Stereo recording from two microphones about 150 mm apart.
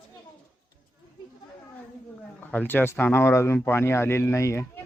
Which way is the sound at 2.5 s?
15° left (ahead or behind).